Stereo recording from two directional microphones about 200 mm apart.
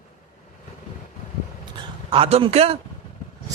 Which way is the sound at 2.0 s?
30° right (ahead or behind).